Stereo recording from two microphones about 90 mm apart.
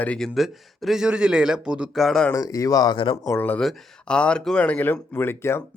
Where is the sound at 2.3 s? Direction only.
40° left (ahead or behind).